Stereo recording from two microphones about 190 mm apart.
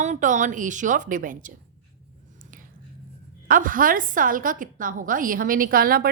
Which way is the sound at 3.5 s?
45° right (ahead or behind).